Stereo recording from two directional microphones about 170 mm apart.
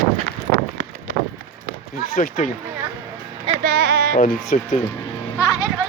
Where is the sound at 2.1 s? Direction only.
55° left (ahead or behind).